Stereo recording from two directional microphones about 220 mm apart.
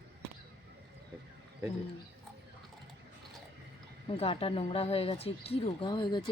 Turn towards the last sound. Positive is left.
turn(degrees=20)  # may be behind; listen again after turning